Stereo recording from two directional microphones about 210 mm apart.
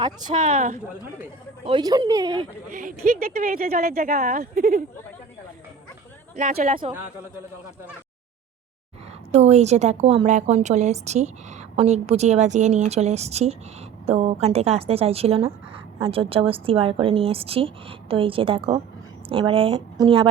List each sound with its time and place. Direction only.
0.3 s a woman's voice: 35° right (ahead or behind)
1.6 s a woman's voice: 20° right (ahead or behind)
2.7 s a woman's voice: 40° right (ahead or behind)
6.3 s a woman's voice: 35° right (ahead or behind)
9.3 s a woman's voice: 30° right (ahead or behind)